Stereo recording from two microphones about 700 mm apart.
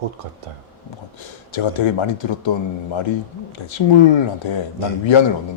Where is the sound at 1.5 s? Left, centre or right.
Left.